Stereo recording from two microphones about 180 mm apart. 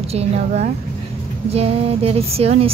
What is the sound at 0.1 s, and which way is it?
A woman's voice, 35° right (ahead or behind).